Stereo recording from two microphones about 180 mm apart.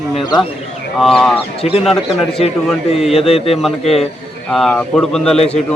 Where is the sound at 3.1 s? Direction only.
35° left (ahead or behind).